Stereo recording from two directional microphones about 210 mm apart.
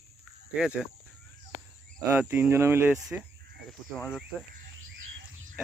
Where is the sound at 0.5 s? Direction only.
5° right (ahead or behind).